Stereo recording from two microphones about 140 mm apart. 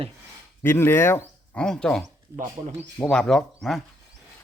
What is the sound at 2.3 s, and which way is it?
Speech, 60° right (ahead or behind).